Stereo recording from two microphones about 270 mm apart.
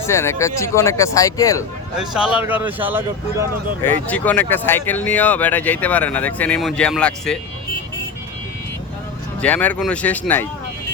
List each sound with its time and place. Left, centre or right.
0.0 s speech: centre
2.0 s speech: centre
4.0 s speech: centre
9.4 s speech: centre